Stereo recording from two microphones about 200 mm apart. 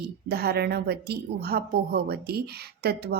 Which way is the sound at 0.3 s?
55° right (ahead or behind).